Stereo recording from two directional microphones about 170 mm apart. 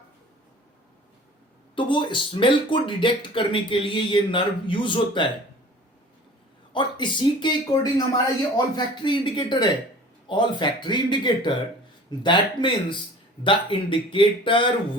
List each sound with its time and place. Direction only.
1.7 s speech: 30° left (ahead or behind)
6.7 s speech: 25° left (ahead or behind)